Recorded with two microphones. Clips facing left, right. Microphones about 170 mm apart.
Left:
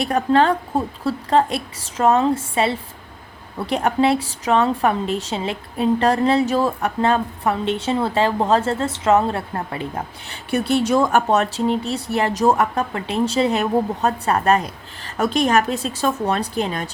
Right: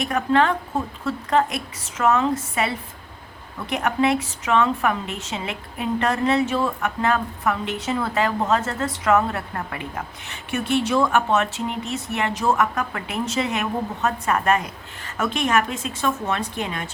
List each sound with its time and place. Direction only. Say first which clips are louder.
0.0 s a woman's voice: left 3 dB; 35° left (ahead or behind)